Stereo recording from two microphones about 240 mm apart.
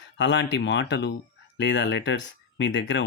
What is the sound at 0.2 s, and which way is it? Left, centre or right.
Speech, left.